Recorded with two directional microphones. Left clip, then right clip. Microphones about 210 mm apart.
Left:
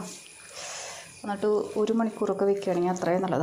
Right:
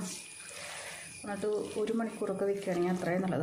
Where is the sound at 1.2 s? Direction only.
10° left (ahead or behind).